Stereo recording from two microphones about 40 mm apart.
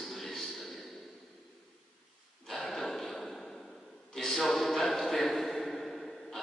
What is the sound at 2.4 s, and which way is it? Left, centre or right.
Gasp, centre.